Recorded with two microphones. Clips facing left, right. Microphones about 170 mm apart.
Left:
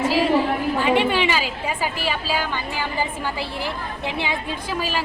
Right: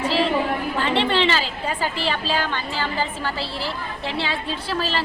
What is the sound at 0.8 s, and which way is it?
A woman's voice, 10° left (ahead or behind).